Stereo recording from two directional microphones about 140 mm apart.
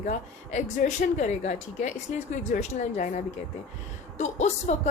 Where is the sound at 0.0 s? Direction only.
60° left (ahead or behind).